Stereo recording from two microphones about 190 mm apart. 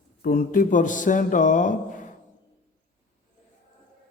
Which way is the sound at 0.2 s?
45° left (ahead or behind).